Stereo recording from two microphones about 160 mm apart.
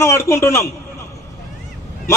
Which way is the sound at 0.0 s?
15° left (ahead or behind).